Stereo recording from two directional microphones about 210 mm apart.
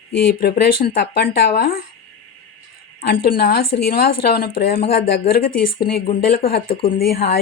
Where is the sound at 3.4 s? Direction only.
50° left (ahead or behind).